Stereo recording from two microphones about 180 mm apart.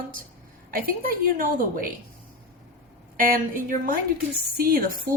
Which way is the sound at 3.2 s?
50° right (ahead or behind).